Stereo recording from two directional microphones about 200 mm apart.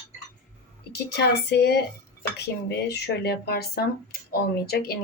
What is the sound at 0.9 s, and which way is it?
Speech, 55° left (ahead or behind).